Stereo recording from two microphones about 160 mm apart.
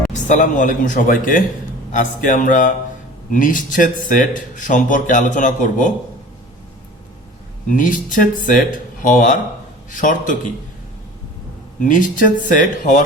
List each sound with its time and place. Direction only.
0.1 s speech: 50° left (ahead or behind)
7.7 s speech: 55° left (ahead or behind)
11.8 s speech: 55° left (ahead or behind)